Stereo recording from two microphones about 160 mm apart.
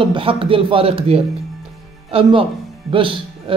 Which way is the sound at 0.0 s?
35° right (ahead or behind).